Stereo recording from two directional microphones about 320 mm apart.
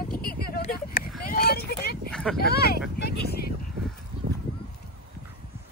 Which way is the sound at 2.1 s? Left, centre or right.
Centre.